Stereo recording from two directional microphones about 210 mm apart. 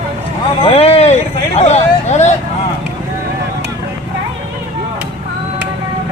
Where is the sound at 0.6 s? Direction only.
30° left (ahead or behind).